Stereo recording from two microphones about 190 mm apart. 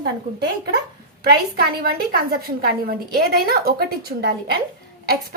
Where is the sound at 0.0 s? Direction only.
60° right (ahead or behind).